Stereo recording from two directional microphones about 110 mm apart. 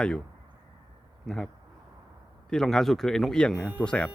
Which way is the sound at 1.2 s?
5° left (ahead or behind).